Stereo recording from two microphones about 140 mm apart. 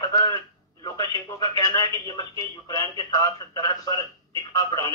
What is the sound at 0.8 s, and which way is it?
Speech, 30° left (ahead or behind).